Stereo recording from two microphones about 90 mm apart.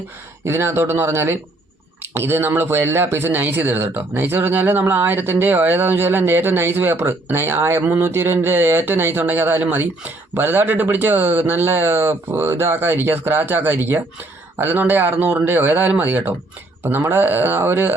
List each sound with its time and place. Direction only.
0.4 s speech: 30° right (ahead or behind)